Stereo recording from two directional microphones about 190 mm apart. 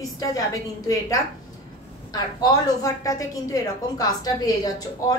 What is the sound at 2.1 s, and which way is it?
A woman's voice, 20° left (ahead or behind).